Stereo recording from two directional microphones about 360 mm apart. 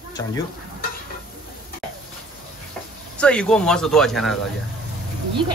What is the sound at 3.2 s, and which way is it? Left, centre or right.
Speech, centre.